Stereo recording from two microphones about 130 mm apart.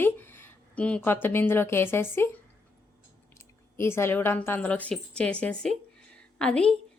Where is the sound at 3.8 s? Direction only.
20° left (ahead or behind).